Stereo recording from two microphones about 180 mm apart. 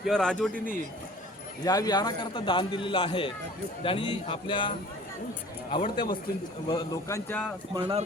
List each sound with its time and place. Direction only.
0.0 s speech: 5° left (ahead or behind)
0.5 s speech: 50° left (ahead or behind)
1.6 s a man's voice: 20° left (ahead or behind)
5.7 s a man's voice: 30° left (ahead or behind)
7.7 s speech: 30° right (ahead or behind)